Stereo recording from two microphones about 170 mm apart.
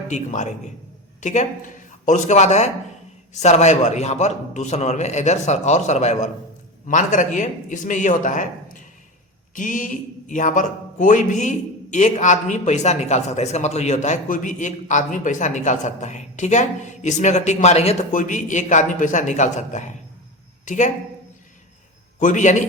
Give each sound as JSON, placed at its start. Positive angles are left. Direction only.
{"t": 0.1, "sound": "speech", "side_deg": 45}
{"t": 22.2, "sound": "speech", "side_deg": 50}